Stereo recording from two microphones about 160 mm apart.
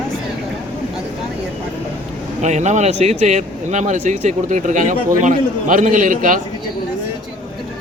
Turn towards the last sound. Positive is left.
turn(degrees=-55)  # may be behind; listen again after turning